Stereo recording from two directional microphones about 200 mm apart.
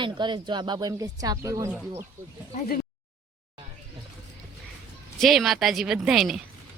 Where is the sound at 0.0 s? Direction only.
25° right (ahead or behind).